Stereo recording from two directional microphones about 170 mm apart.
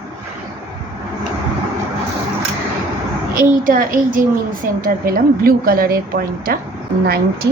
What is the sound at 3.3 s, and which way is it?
A child's voice, 50° right (ahead or behind).